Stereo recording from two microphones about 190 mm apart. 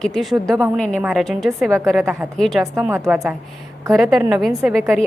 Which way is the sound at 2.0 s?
10° right (ahead or behind).